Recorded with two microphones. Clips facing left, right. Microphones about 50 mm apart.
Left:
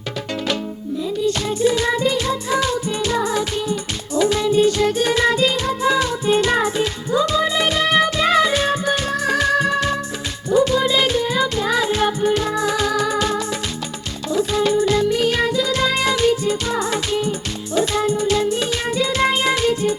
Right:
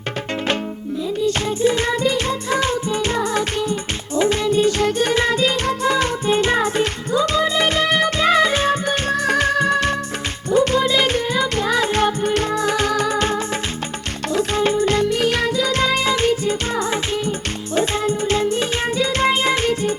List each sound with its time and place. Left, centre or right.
1.4 s music: right
14.6 s music: right
15.2 s music: right
15.6 s music: right